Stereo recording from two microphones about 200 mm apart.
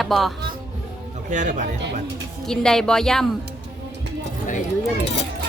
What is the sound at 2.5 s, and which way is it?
Speech, 5° left (ahead or behind).